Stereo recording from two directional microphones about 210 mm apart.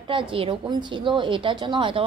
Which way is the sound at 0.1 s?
25° right (ahead or behind).